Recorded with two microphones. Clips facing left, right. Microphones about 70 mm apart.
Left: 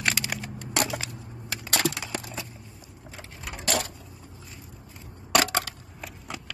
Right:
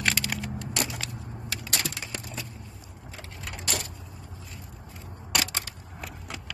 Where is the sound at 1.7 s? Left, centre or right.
Left.